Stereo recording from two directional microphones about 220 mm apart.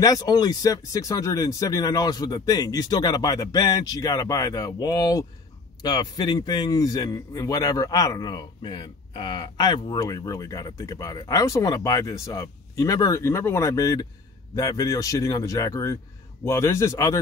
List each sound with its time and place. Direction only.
0.0 s a man's voice: 15° left (ahead or behind)